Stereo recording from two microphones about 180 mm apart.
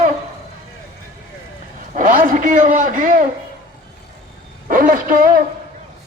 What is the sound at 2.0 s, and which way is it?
A man's voice, 45° right (ahead or behind).